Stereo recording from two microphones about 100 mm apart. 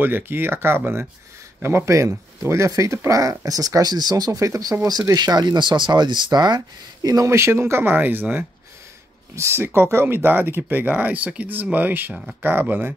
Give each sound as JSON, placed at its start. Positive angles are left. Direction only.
{"t": 0.0, "sound": "speech", "side_deg": -20}